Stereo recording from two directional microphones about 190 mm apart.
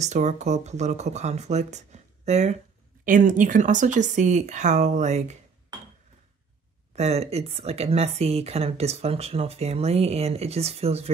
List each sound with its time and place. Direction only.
0.0 s speech: 35° right (ahead or behind)
7.0 s speech: 35° right (ahead or behind)